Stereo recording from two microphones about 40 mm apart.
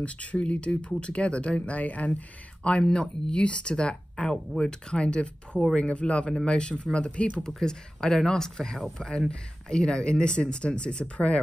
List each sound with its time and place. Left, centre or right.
0.0 s speech: left
1.8 s speech: left
7.6 s speech: centre